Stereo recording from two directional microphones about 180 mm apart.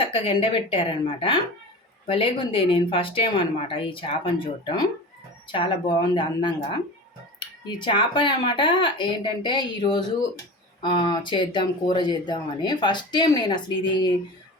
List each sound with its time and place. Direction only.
0.0 s speech: 30° left (ahead or behind)